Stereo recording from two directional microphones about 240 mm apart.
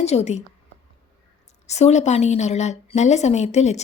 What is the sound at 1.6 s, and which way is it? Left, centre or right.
A woman's voice, left.